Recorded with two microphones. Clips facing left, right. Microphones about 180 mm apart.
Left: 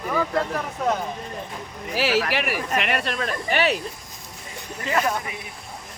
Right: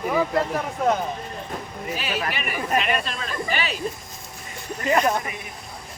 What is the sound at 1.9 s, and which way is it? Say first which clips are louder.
Speech: left 6 dB; 80° left.